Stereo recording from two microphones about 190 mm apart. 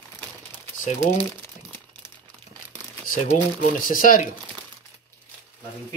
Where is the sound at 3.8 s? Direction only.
45° left (ahead or behind).